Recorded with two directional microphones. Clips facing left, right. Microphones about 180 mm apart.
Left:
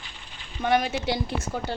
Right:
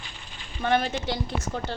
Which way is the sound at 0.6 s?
10° left (ahead or behind).